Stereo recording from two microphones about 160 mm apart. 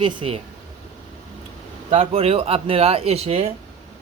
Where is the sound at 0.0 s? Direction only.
35° right (ahead or behind).